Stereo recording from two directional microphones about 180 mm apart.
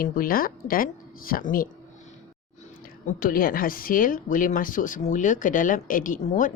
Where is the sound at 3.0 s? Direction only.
50° left (ahead or behind).